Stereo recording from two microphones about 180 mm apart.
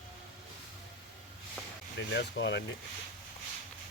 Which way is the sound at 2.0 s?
75° left (ahead or behind).